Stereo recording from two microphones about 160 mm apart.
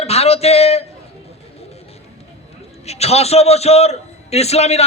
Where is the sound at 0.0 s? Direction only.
40° left (ahead or behind).